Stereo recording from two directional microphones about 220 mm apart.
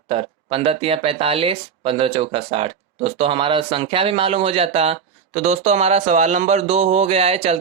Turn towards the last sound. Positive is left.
turn(degrees=-30)  # may be behind; listen again after turning